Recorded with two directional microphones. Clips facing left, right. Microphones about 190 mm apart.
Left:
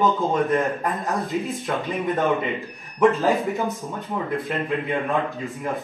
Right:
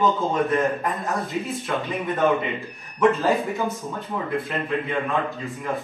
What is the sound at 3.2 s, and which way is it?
Speech, 15° left (ahead or behind).